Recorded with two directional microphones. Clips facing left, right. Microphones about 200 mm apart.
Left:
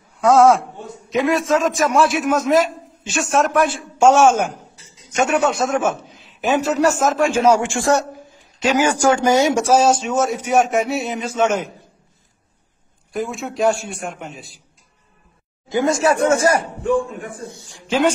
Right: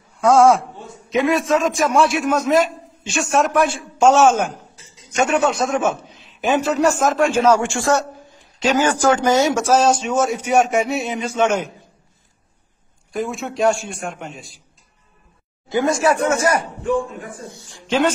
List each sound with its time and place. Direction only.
0.2 s a man's voice: centre (ahead or behind)
5.7 s a sound: 5° left (ahead or behind)
6.7 s a man's voice: 5° left (ahead or behind)
13.1 s a man's voice: centre (ahead or behind)
15.7 s speech: 25° left (ahead or behind)
17.8 s a man's voice: 5° left (ahead or behind)